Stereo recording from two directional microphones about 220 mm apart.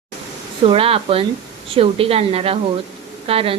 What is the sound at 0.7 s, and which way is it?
A woman's voice, 25° right (ahead or behind).